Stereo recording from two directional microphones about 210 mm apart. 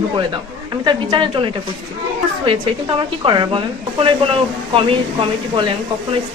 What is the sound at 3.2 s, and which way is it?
Speech, 20° right (ahead or behind).